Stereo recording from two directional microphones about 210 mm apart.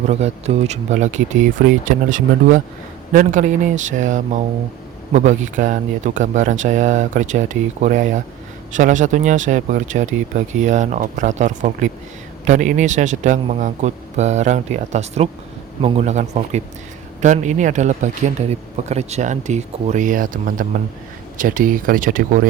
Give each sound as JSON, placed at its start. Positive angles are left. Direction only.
{"t": 0.1, "sound": "speech", "side_deg": -30}